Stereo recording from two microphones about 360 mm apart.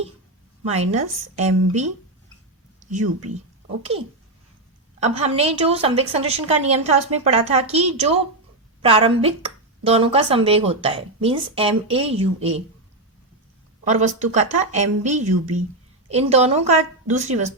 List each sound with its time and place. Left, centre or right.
0.6 s speech: centre
4.9 s speech: centre
13.8 s speech: centre